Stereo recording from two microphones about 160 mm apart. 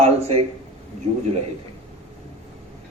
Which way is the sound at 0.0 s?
40° right (ahead or behind).